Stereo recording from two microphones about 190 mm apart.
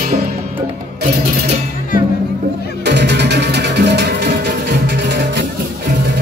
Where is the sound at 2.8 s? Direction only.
65° right (ahead or behind).